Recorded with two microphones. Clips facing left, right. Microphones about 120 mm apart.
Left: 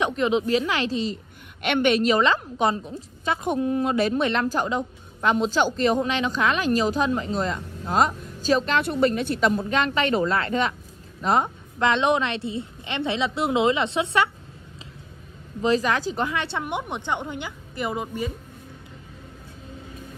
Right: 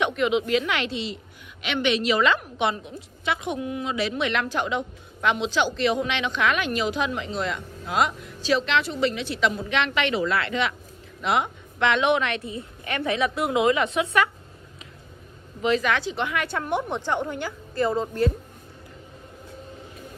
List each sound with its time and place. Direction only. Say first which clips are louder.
0.0 s a woman's voice: left 1 dB; 35° left (ahead or behind)
1.6 s a woman's voice: left 4 dB; 50° left (ahead or behind); by 14.3 s 25° left (ahead or behind)
15.6 s a woman's voice: left 1 dB; 35° left (ahead or behind); by 18.3 s 10° left (ahead or behind)